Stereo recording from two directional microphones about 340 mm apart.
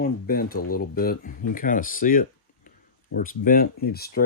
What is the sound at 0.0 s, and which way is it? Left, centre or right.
Speech, left.